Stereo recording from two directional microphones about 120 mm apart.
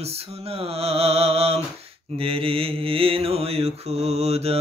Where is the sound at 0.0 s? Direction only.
60° right (ahead or behind).